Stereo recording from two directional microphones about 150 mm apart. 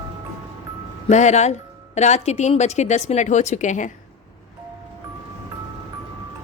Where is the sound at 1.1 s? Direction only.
50° left (ahead or behind).